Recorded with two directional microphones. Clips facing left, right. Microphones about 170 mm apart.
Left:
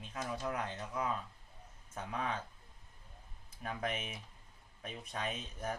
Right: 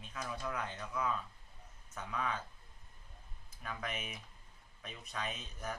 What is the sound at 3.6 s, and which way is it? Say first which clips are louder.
Speech: left 4 dB; 35° left (ahead or behind).